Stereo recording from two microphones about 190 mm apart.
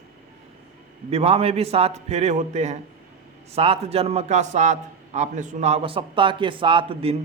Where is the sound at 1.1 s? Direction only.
30° right (ahead or behind).